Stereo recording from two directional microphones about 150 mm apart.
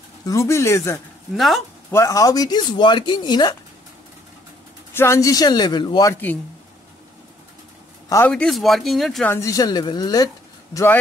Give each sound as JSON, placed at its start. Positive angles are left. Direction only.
{"t": 0.2, "sound": "speech", "side_deg": 20}
{"t": 1.3, "sound": "speech", "side_deg": 0}
{"t": 1.9, "sound": "speech", "side_deg": 20}
{"t": 4.9, "sound": "speech", "side_deg": 15}
{"t": 8.3, "sound": "speech", "side_deg": 5}
{"t": 9.3, "sound": "speech", "side_deg": 20}